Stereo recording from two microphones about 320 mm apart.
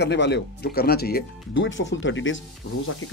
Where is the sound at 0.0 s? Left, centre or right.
Left.